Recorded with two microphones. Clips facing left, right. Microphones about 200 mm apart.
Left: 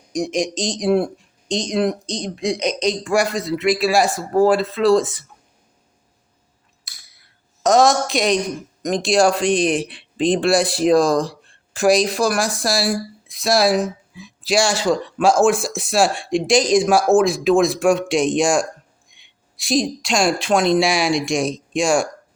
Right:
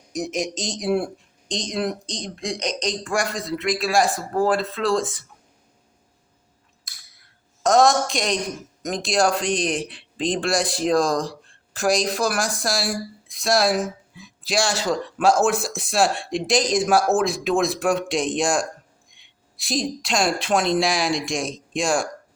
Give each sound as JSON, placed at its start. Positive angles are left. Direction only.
{"t": 0.1, "sound": "speech", "side_deg": -5}
{"t": 7.6, "sound": "speech", "side_deg": 0}
{"t": 19.6, "sound": "speech", "side_deg": 0}